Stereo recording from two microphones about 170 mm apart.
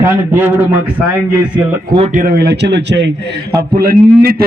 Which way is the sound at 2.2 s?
70° right (ahead or behind).